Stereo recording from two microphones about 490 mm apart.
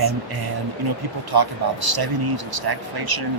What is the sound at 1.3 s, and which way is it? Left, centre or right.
Speech, right.